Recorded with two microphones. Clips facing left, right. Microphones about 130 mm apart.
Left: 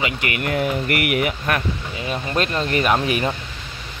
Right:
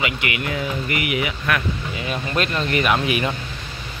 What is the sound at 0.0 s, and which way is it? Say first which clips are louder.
Speech: left 1 dB; 40° left (ahead or behind).